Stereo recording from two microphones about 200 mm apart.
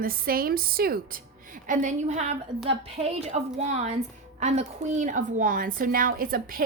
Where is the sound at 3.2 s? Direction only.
35° right (ahead or behind).